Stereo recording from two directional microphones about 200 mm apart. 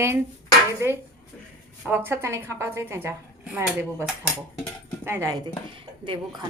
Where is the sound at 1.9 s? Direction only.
10° right (ahead or behind).